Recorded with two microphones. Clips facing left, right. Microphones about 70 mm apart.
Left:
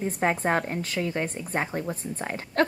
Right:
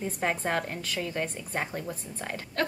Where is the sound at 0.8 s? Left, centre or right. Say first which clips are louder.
Left 3 dB; left.